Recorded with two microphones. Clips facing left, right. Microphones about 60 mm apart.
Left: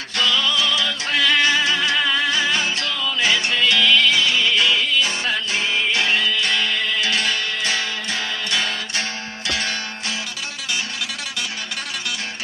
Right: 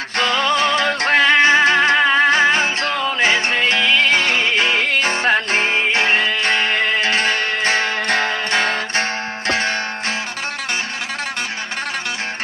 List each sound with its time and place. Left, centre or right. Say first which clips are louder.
0.2 s music: right 4 dB; right